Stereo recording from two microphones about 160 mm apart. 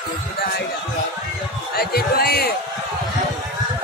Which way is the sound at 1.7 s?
75° left (ahead or behind).